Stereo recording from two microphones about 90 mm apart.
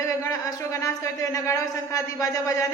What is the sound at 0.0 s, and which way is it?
A woman's voice, 35° left (ahead or behind).